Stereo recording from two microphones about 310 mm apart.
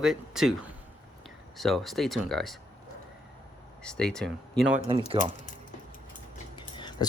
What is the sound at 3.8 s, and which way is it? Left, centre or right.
Speech, centre.